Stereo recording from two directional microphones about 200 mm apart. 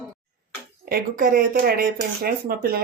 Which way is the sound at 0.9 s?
45° right (ahead or behind).